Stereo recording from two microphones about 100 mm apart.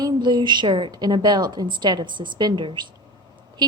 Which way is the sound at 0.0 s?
45° right (ahead or behind).